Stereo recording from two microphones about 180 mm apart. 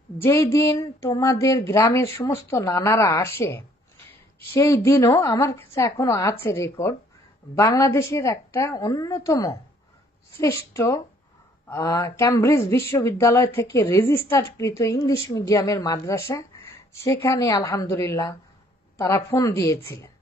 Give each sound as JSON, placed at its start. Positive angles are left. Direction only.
{"t": 0.2, "sound": "a woman's voice", "side_deg": 15}